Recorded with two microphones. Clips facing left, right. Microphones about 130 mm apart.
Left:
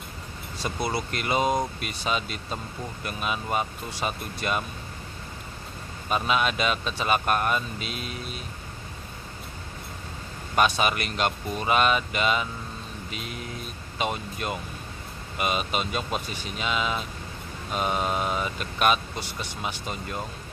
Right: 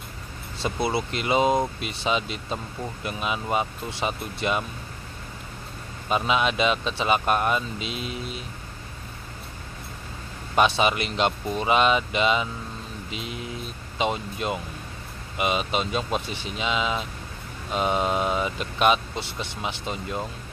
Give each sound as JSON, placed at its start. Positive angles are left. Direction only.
{"t": 0.7, "sound": "speech", "side_deg": -25}
{"t": 6.0, "sound": "speech", "side_deg": -20}
{"t": 10.5, "sound": "speech", "side_deg": -20}
{"t": 13.9, "sound": "speech", "side_deg": -20}